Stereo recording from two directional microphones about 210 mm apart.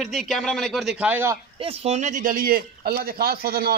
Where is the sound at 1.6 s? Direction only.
30° right (ahead or behind).